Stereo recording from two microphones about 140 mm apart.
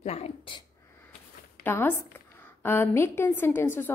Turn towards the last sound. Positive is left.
turn(degrees=15)  # may be behind; listen again after turning